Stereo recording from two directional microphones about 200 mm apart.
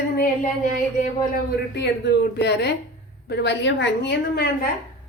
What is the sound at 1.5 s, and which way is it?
Child singing, 55° left (ahead or behind).